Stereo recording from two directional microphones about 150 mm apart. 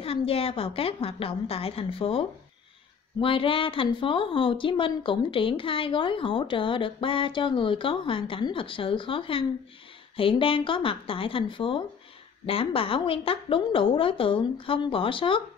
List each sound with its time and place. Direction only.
0.0 s a woman's voice: 40° left (ahead or behind)